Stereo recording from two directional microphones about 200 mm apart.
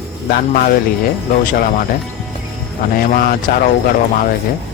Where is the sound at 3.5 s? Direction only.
50° left (ahead or behind).